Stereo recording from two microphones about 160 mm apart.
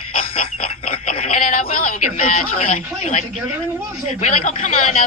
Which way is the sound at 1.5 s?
65° left (ahead or behind).